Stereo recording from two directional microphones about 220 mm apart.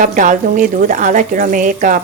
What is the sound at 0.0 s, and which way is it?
Speech, 35° right (ahead or behind).